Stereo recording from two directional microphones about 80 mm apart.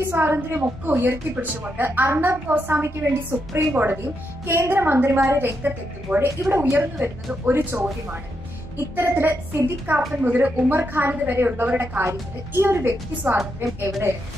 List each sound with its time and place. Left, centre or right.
0.1 s a woman's voice: right
12.0 s a woman's voice: right